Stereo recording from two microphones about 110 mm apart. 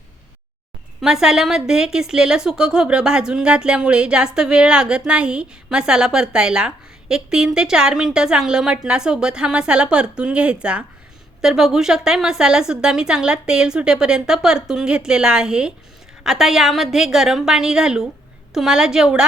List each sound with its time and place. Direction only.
1.0 s a woman's voice: 5° right (ahead or behind)